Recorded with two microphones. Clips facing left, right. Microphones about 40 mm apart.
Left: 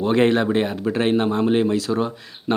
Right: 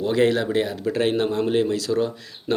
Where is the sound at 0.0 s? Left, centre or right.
Left.